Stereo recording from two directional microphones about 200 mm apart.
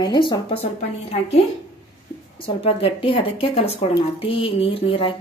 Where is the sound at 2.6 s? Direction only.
30° left (ahead or behind).